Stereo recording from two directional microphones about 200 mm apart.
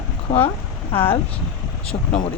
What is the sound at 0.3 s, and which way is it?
Speech, 40° left (ahead or behind).